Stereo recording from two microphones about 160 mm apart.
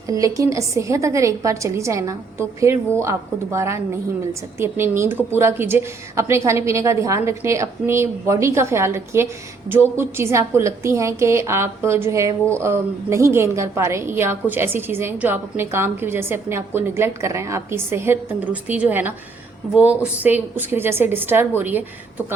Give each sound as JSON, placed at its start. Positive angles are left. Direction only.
{"t": 0.1, "sound": "a woman's voice", "side_deg": -20}